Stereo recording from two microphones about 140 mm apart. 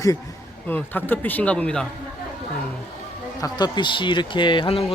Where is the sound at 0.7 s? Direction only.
15° left (ahead or behind).